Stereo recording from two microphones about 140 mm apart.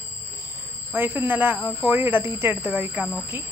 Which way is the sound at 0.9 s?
15° right (ahead or behind).